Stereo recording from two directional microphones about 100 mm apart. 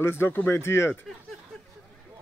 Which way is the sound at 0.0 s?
25° left (ahead or behind).